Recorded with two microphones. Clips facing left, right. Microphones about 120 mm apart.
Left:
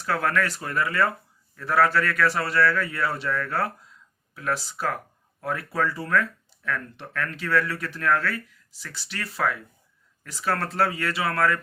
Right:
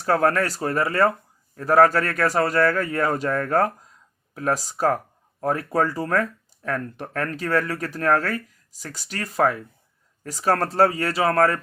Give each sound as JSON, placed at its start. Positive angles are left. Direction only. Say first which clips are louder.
{"t": 0.0, "sound": "a man's voice", "louder": "right 5 dB", "side_deg": -40}